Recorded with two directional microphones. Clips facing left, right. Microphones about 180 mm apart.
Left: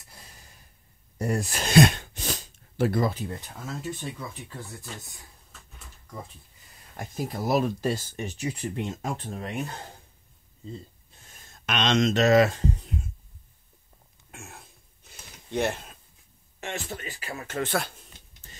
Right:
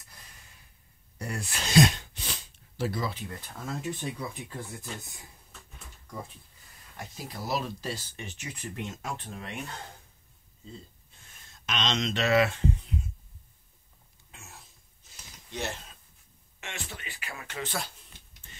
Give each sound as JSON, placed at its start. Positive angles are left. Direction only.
{"t": 1.1, "sound": "speech", "side_deg": 45}
{"t": 3.6, "sound": "speech", "side_deg": 0}
{"t": 4.4, "sound": "speech", "side_deg": -15}
{"t": 7.0, "sound": "speech", "side_deg": 50}
{"t": 11.5, "sound": "speech", "side_deg": 60}
{"t": 14.3, "sound": "a sound", "side_deg": 55}
{"t": 16.5, "sound": "speech", "side_deg": 40}
{"t": 17.6, "sound": "speech", "side_deg": 55}
{"t": 18.4, "sound": "printer", "side_deg": 35}